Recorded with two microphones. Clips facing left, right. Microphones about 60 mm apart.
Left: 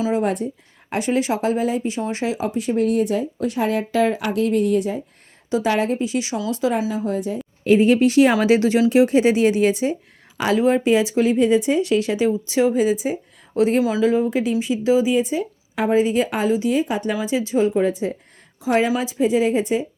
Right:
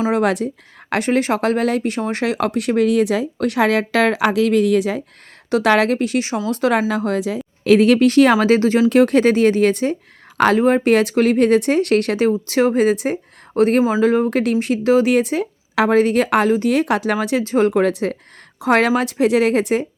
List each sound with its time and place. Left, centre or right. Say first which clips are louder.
0.1 s a woman's voice: right 3 dB; right
5.5 s speech: right 5 dB; right
6.5 s speech: right 4 dB; right
8.9 s speech: right 2 dB; right
10.8 s speech: right 3 dB; right